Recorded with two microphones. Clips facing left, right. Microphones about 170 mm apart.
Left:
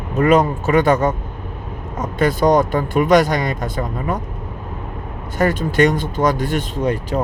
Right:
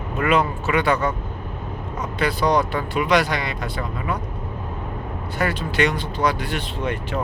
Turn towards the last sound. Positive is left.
turn(degrees=40)  # may be behind; listen again after turning